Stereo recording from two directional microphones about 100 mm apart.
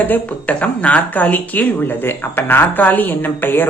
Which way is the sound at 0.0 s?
15° left (ahead or behind).